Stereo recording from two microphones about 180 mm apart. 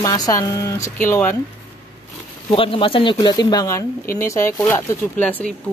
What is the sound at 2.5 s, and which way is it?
Speech, 30° left (ahead or behind).